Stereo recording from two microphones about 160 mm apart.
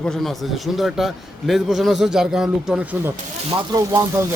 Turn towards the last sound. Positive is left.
turn(degrees=-15)  # may be behind; listen again after turning